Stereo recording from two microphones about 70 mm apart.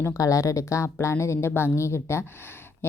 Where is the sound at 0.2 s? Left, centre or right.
Left.